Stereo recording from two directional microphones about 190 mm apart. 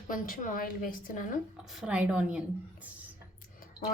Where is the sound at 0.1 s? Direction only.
45° left (ahead or behind).